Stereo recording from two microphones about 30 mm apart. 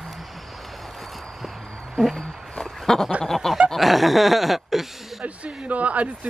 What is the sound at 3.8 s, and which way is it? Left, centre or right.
Chuckle, centre.